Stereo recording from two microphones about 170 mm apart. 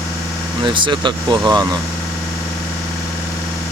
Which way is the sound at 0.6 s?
30° right (ahead or behind).